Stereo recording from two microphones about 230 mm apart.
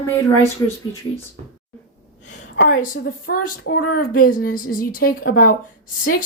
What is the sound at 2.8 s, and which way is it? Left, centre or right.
A woman's voice, left.